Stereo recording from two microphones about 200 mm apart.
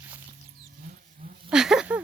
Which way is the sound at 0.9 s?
45° right (ahead or behind).